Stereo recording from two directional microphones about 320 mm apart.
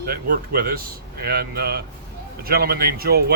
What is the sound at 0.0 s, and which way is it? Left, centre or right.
Speech, right.